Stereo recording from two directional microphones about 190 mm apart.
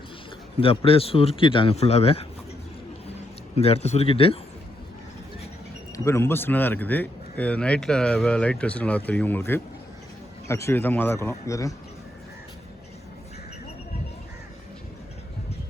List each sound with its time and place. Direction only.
0.9 s speech: 30° left (ahead or behind)
3.5 s speech: 35° left (ahead or behind)
6.1 s a man's voice: 15° left (ahead or behind)